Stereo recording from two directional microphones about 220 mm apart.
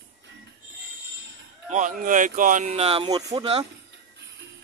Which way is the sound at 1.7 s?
35° right (ahead or behind).